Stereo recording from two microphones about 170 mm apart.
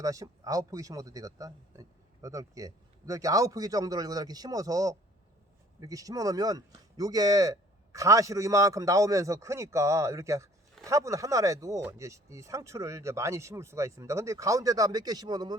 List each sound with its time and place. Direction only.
0.0 s speech: 20° right (ahead or behind)